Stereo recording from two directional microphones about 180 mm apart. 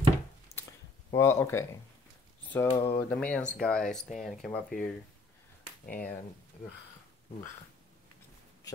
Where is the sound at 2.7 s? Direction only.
30° left (ahead or behind).